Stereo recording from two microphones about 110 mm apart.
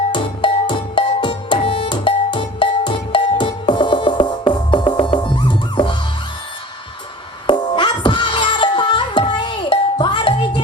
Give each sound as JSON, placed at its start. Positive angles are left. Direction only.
{"t": 0.1, "sound": "music", "side_deg": 50}
{"t": 7.4, "sound": "music", "side_deg": 45}